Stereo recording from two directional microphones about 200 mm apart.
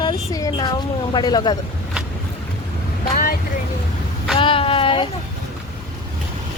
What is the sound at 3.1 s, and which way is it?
Vehicle, 50° left (ahead or behind).